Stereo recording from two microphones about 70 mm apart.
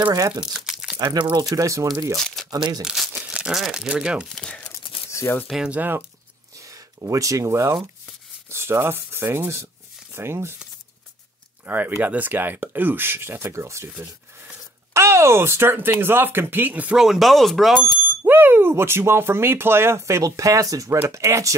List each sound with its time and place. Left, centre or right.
0.3 s speech: centre
0.6 s crumpling: centre
1.3 s speech: right
2.5 s speech: right
2.8 s speech: centre
3.2 s crumpling: centre
3.5 s speech: centre
4.6 s tearing: left
5.8 s speech: right
6.6 s speech: right
11.6 s speech: right
15.0 s speech: right
16.9 s speech: centre
18.2 s speech: right